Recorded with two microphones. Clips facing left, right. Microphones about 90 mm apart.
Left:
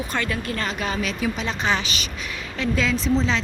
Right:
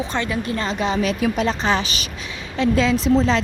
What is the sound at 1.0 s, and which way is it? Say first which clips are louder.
Speech: right 6 dB; 45° right (ahead or behind).